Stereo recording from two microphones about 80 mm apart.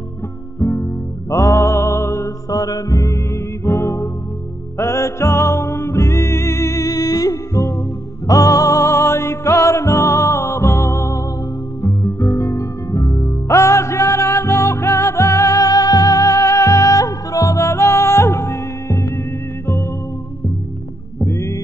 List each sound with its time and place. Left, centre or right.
0.6 s music: left
21.2 s music: left